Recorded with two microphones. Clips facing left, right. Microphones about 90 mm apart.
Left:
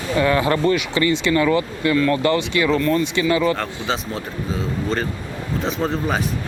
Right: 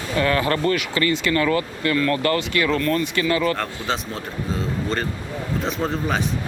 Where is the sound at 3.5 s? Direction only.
Centre (ahead or behind).